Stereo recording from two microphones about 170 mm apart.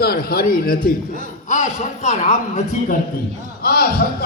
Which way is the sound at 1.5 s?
45° left (ahead or behind).